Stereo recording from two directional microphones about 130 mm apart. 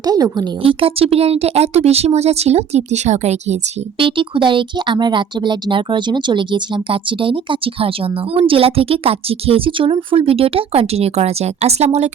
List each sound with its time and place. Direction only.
0.0 s a woman's voice: 30° right (ahead or behind)
0.6 s speech: 45° right (ahead or behind)
3.9 s speech: 40° right (ahead or behind); by 12.1 s 55° right (ahead or behind)